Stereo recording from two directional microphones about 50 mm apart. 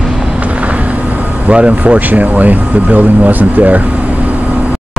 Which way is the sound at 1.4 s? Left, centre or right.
Right.